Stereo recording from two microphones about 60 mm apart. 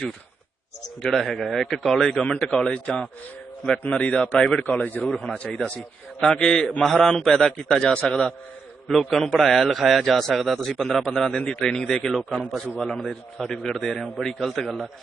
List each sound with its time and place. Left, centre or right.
1.0 s a man's voice: centre
4.6 s a man's voice: left; by 8.3 s centre
8.9 s a man's voice: centre